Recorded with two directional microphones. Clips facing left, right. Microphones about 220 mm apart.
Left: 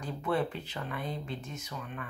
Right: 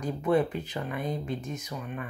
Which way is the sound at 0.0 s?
15° right (ahead or behind).